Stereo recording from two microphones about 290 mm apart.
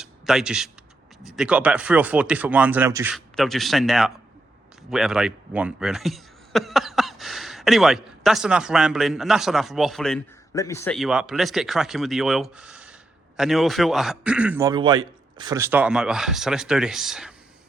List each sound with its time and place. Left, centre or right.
0.0 s speech: centre